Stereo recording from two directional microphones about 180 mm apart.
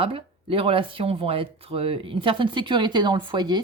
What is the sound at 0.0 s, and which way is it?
Speech, 30° right (ahead or behind).